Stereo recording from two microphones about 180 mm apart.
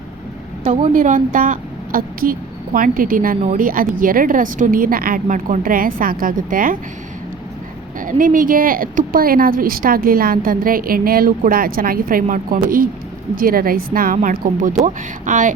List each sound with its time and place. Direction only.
0.6 s speech: 30° right (ahead or behind)
0.9 s speech: 50° right (ahead or behind)
8.0 s speech: 50° right (ahead or behind)